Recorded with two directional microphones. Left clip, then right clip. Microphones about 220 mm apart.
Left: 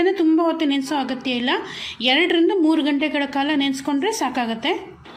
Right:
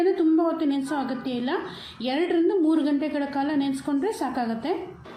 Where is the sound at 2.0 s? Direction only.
25° left (ahead or behind).